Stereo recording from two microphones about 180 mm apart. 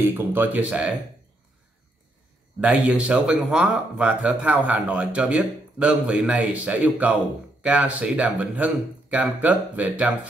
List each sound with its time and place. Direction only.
0.0 s speech: 10° right (ahead or behind)
2.6 s speech: 5° right (ahead or behind)